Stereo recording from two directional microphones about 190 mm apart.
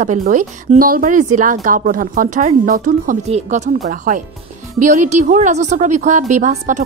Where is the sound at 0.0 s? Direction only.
40° right (ahead or behind).